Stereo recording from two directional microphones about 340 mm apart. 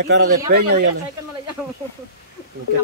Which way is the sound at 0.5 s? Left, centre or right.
Right.